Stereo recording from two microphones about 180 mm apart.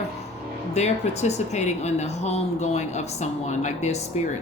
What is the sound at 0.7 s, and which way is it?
Speech, 40° left (ahead or behind).